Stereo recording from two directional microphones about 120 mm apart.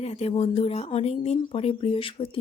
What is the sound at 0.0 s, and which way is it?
Speech, 60° left (ahead or behind).